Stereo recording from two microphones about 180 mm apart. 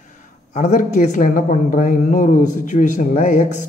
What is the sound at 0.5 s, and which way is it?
Speech, 45° left (ahead or behind).